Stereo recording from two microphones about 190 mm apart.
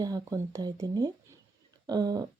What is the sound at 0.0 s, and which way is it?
Speech, 20° right (ahead or behind).